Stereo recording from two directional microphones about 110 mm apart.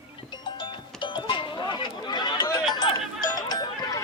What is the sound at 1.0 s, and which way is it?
Music, 50° left (ahead or behind).